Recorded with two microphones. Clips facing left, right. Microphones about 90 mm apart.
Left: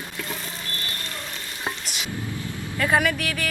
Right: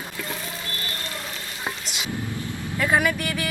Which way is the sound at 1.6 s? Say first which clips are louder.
Left 1 dB; 5° right (ahead or behind).